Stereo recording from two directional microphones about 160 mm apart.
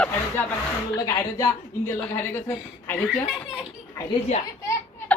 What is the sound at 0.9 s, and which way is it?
A woman's voice, 25° left (ahead or behind).